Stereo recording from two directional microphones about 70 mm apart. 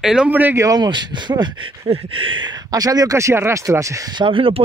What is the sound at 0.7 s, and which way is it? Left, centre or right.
Speech, right.